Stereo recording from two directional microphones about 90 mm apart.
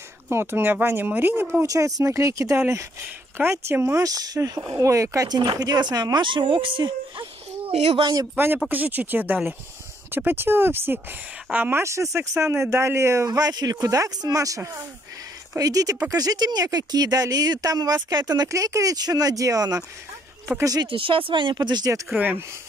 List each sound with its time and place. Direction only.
0.3 s speech: 25° right (ahead or behind)
1.6 s speech: 40° right (ahead or behind)
6.2 s speech: 65° right (ahead or behind)
8.6 s speech: 20° right (ahead or behind)
11.8 s speech: 35° right (ahead or behind)
20.8 s speech: 75° right (ahead or behind); by 21.9 s 50° right (ahead or behind)
22.1 s speech: 20° right (ahead or behind)